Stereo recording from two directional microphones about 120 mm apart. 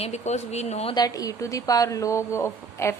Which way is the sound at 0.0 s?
70° left (ahead or behind).